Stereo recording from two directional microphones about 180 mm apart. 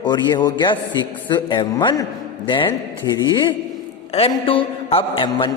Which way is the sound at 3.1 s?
20° left (ahead or behind).